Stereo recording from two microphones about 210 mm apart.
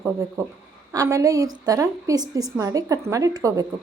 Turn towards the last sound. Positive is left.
turn(degrees=-15)  # may be behind; listen again after turning